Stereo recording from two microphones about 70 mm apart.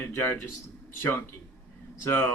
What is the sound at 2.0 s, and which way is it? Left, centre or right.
Speech, left.